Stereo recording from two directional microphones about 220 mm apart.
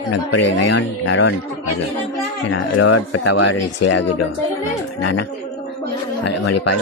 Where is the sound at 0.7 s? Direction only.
55° left (ahead or behind).